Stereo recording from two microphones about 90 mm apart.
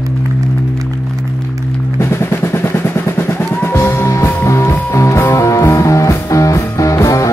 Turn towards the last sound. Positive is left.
turn(degrees=35)  # may be behind; listen again after turning